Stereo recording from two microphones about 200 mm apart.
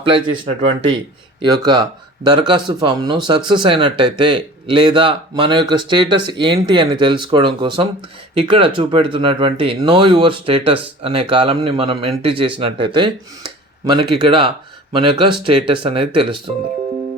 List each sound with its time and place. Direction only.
0.4 s speech: 30° right (ahead or behind)